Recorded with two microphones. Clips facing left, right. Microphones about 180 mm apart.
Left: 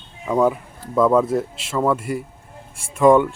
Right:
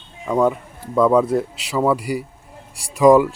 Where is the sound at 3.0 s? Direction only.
Centre (ahead or behind).